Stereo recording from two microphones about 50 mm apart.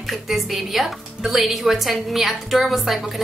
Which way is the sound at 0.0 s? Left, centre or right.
Centre.